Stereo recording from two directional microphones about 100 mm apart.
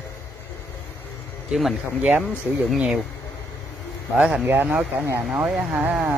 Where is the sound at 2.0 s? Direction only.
10° right (ahead or behind).